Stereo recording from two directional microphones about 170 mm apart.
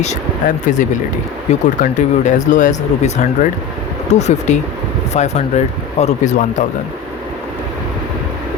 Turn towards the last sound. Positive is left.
turn(degrees=45)  # may be behind; listen again after turning